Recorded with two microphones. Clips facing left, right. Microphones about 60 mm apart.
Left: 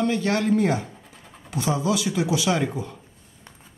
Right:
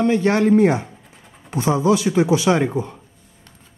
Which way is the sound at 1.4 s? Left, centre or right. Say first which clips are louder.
Right 7 dB; right.